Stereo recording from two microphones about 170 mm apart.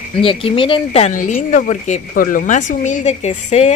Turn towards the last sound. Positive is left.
turn(degrees=40)  # may be behind; listen again after turning